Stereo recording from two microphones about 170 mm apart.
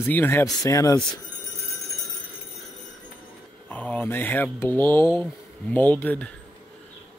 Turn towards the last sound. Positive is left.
turn(degrees=10)  # may be behind; listen again after turning